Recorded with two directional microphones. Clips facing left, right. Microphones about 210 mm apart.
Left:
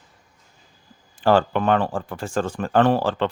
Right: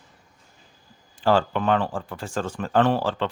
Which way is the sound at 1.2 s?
50° left (ahead or behind).